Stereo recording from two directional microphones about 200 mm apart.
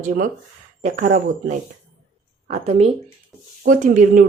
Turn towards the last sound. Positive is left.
turn(degrees=-40)  # may be behind; listen again after turning